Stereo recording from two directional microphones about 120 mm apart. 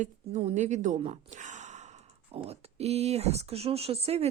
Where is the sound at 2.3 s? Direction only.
60° right (ahead or behind).